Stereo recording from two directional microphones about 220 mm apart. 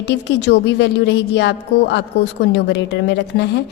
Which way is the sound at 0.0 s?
50° left (ahead or behind).